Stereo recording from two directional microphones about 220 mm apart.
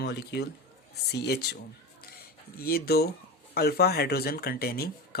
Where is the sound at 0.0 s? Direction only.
50° left (ahead or behind).